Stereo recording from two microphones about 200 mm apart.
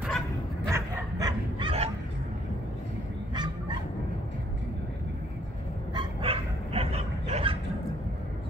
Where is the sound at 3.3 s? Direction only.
20° right (ahead or behind).